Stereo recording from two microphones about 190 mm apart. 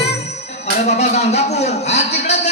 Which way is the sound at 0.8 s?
35° left (ahead or behind).